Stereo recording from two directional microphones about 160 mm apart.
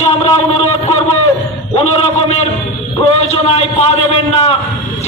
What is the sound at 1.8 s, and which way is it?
A man's voice, 40° left (ahead or behind).